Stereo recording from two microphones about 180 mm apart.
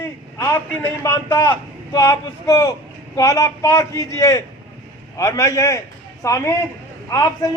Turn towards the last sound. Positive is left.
turn(degrees=20)  # may be behind; listen again after turning